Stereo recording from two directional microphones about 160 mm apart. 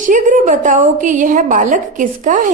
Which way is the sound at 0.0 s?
55° right (ahead or behind).